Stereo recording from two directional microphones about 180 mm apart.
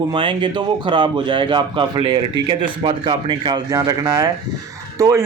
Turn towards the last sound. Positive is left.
turn(degrees=-15)  # may be behind; listen again after turning